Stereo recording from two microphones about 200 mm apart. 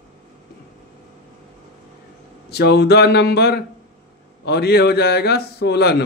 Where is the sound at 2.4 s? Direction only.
55° left (ahead or behind).